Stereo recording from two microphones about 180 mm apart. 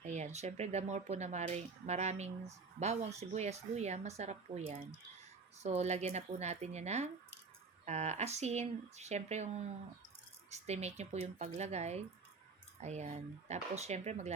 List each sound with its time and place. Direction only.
0.0 s speech: 40° right (ahead or behind)